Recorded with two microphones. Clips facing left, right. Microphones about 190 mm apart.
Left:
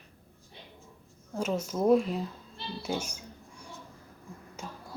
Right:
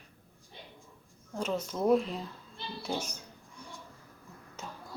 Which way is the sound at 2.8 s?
10° left (ahead or behind).